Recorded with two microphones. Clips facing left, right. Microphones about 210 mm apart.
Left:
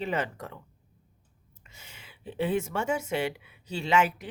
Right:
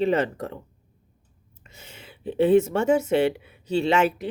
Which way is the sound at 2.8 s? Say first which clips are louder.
Right 9 dB; 10° left (ahead or behind).